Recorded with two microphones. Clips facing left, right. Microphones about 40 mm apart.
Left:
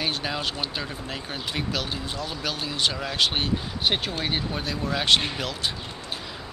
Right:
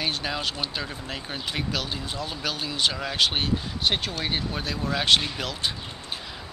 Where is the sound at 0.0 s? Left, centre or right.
Centre.